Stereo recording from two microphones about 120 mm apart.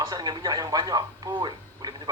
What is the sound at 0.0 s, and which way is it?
Speech, 35° right (ahead or behind).